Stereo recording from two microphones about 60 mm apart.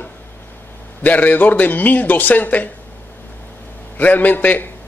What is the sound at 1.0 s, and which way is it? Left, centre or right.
A man's voice, left.